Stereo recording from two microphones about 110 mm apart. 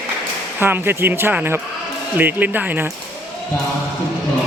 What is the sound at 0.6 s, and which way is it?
Speech, 20° right (ahead or behind).